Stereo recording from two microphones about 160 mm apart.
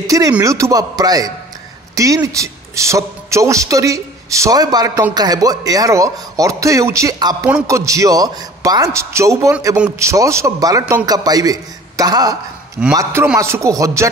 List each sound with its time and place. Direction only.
0.0 s a man's voice: 20° right (ahead or behind)